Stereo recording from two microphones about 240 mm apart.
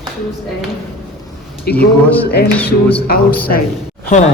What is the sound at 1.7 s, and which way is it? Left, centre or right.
Speech, left.